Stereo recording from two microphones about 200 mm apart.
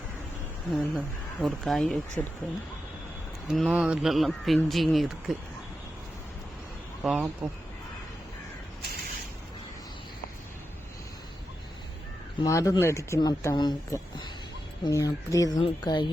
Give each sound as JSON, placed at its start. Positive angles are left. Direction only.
{"t": 0.7, "sound": "speech", "side_deg": 0}
{"t": 3.4, "sound": "speech", "side_deg": 0}
{"t": 7.0, "sound": "speech", "side_deg": -5}
{"t": 12.4, "sound": "a woman's voice", "side_deg": 15}